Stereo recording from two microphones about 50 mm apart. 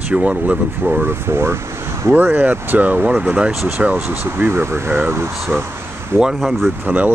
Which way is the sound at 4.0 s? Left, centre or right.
Right.